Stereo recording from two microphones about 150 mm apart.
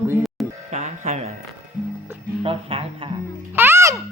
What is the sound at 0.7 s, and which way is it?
Speech, 50° right (ahead or behind).